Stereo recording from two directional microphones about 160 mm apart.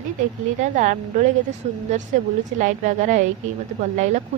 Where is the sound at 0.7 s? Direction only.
50° right (ahead or behind).